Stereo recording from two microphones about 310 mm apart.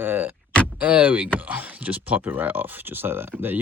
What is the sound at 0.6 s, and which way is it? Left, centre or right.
Speech, centre.